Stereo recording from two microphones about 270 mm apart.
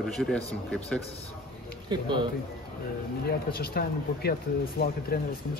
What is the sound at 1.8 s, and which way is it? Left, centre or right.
Speech, centre.